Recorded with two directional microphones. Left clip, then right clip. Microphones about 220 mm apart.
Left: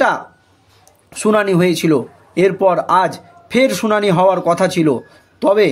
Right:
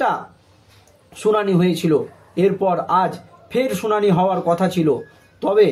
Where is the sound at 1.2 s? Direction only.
45° left (ahead or behind).